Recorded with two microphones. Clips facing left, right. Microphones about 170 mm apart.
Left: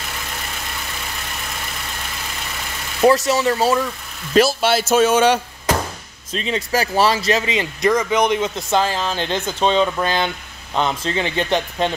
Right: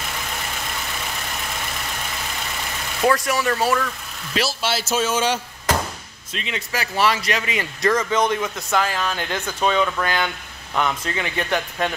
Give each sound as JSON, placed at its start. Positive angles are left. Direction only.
{"t": 3.3, "sound": "speech", "side_deg": 25}
{"t": 4.3, "sound": "a man's voice", "side_deg": 50}
{"t": 6.3, "sound": "speech", "side_deg": 35}